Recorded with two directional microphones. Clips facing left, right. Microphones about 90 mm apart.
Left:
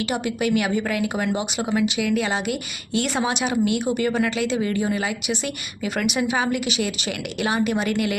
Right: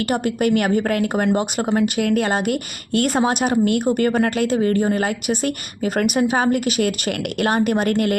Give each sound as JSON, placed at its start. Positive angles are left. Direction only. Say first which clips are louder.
{"t": 0.1, "sound": "a woman's voice", "louder": "right 5 dB", "side_deg": -50}